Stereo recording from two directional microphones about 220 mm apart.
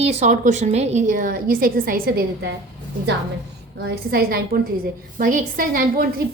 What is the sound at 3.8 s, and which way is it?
A woman's voice, 45° right (ahead or behind).